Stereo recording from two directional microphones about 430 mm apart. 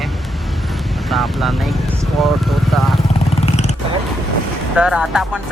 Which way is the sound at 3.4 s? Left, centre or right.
Centre.